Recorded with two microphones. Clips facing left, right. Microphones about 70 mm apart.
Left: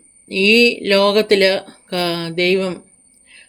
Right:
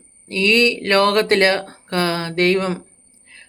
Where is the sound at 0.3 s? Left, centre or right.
Right.